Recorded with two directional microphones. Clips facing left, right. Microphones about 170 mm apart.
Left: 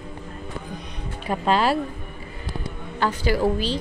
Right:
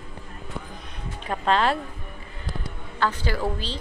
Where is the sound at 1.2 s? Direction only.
10° left (ahead or behind).